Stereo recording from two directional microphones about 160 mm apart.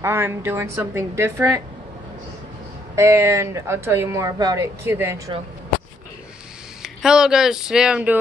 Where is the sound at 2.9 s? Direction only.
15° right (ahead or behind).